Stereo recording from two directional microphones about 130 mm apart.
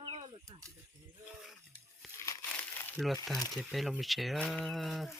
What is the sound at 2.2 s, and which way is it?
Crumpling, 25° left (ahead or behind).